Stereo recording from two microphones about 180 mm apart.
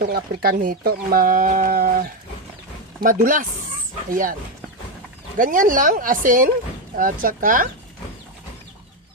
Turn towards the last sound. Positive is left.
turn(degrees=-50)  # may be behind; listen again after turning